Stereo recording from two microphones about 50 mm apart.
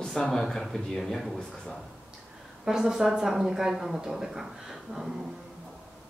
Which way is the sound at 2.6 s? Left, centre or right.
Centre.